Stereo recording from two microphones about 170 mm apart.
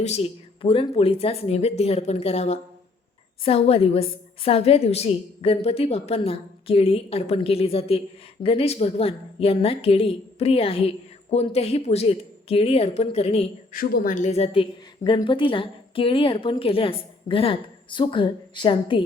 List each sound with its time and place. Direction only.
0.0 s a woman's voice: 40° left (ahead or behind)
13.7 s a woman's voice: 55° left (ahead or behind); by 19.0 s 30° left (ahead or behind)